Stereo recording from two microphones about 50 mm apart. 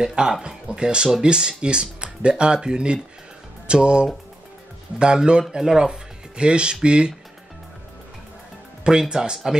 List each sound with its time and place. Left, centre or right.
0.0 s speech: centre
9.1 s speech: centre